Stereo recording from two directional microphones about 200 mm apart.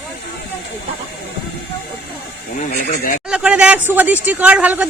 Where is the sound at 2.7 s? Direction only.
45° left (ahead or behind).